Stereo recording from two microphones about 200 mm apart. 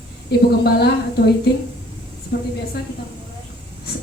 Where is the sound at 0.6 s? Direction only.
55° left (ahead or behind).